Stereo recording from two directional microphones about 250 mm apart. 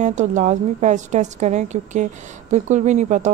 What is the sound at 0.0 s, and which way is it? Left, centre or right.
Speech, right.